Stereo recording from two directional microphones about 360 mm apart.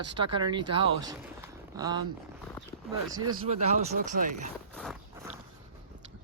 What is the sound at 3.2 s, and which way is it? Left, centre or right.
Speech, centre.